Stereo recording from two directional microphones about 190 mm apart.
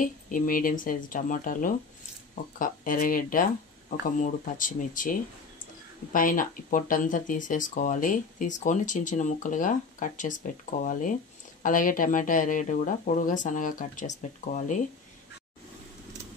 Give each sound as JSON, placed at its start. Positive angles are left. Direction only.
{"t": 0.0, "sound": "speech", "side_deg": 45}